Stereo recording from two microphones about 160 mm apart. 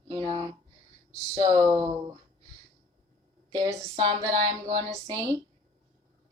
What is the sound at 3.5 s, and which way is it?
Speech, 25° right (ahead or behind).